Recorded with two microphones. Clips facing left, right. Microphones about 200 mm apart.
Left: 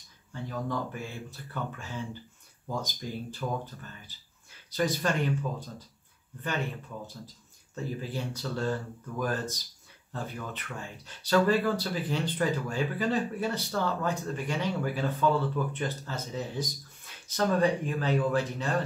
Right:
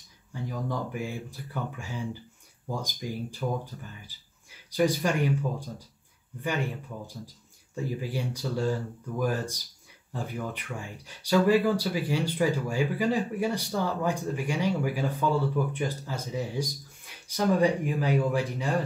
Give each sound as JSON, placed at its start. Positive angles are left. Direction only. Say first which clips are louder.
{"t": 0.3, "sound": "speech", "louder": "right 1 dB", "side_deg": -10}
{"t": 6.4, "sound": "speech", "louder": "right 3 dB", "side_deg": -10}